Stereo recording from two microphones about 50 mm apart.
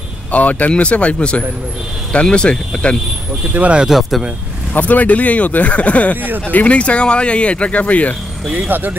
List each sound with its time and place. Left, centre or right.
0.3 s speech: left
3.5 s speech: right
3.8 s speech: centre
4.7 s speech: left
8.5 s speech: right